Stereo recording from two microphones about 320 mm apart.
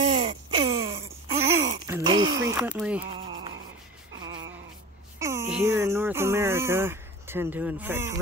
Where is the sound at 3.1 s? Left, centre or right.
Centre.